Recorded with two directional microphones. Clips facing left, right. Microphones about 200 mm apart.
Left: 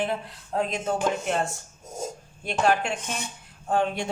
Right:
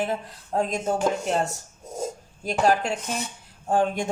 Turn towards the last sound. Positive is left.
turn(degrees=-45)  # may be behind; listen again after turning